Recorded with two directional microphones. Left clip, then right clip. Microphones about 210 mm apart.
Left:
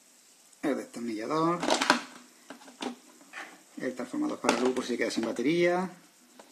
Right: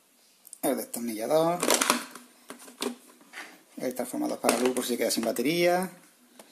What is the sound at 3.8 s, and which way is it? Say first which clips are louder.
Speech: right 2 dB; 20° right (ahead or behind).